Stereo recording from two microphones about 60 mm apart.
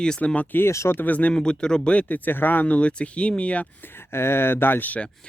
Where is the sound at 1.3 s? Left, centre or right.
Centre.